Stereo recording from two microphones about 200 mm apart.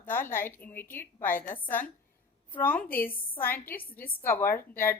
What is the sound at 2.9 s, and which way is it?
Speech, 45° left (ahead or behind).